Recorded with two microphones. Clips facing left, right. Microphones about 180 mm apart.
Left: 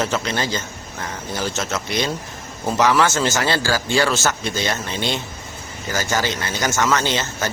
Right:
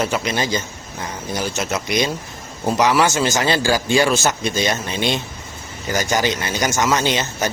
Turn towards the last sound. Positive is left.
turn(degrees=-15)  # may be behind; listen again after turning